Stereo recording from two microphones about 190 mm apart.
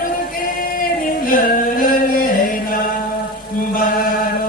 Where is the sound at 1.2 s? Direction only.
50° left (ahead or behind).